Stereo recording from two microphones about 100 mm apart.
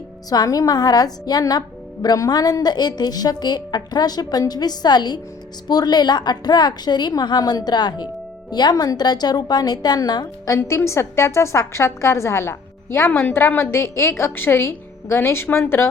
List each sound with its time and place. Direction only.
0.3 s a woman's voice: 40° left (ahead or behind)